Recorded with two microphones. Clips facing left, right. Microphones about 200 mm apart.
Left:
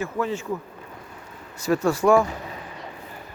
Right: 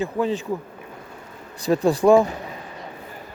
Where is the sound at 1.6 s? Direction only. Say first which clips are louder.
Right 3 dB; 15° right (ahead or behind).